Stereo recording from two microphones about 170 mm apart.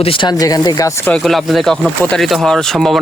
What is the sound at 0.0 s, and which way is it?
Speech, 30° left (ahead or behind).